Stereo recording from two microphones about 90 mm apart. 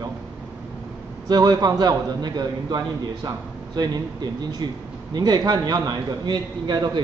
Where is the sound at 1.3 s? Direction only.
45° right (ahead or behind).